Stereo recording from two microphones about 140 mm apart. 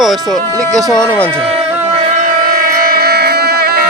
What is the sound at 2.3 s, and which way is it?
Music, 90° right.